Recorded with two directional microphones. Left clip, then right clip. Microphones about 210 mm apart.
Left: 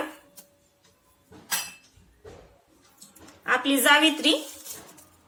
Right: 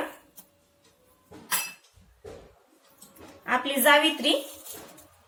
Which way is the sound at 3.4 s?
55° left (ahead or behind).